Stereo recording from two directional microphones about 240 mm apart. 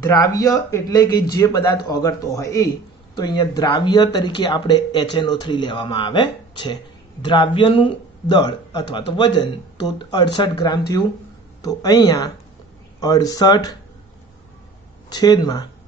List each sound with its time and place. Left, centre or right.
0.0 s speech: centre
15.0 s speech: centre